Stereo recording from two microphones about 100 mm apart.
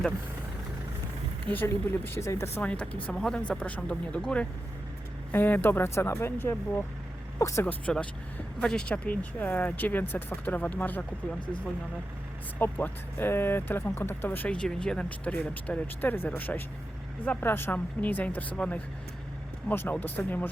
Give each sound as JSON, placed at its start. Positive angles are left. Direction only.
{"t": 1.5, "sound": "speech", "side_deg": 20}
{"t": 2.6, "sound": "speech", "side_deg": 10}
{"t": 5.3, "sound": "speech", "side_deg": 15}
{"t": 7.6, "sound": "speech", "side_deg": 15}
{"t": 12.5, "sound": "speech", "side_deg": 20}